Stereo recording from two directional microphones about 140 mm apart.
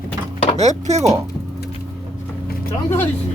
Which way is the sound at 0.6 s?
55° right (ahead or behind).